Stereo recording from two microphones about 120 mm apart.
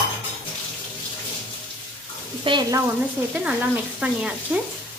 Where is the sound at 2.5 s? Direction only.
45° right (ahead or behind).